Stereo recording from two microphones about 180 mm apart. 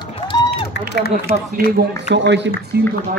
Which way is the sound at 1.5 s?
60° right (ahead or behind).